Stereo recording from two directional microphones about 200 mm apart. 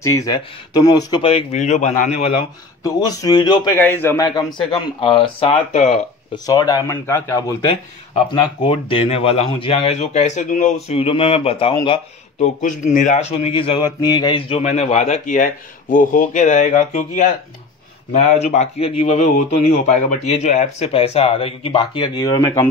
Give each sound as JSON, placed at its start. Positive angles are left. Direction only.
{"t": 0.0, "sound": "speech", "side_deg": 15}
{"t": 2.8, "sound": "speech", "side_deg": 20}
{"t": 3.8, "sound": "speech", "side_deg": 10}
{"t": 4.6, "sound": "speech", "side_deg": 25}
{"t": 6.3, "sound": "speech", "side_deg": 20}
{"t": 8.6, "sound": "speech", "side_deg": 25}
{"t": 12.6, "sound": "a man's voice", "side_deg": 40}